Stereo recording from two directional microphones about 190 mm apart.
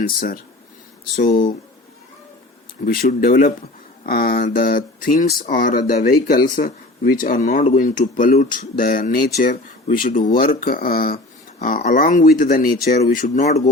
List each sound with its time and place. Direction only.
1.1 s speech: 50° left (ahead or behind)
2.8 s speech: 50° left (ahead or behind)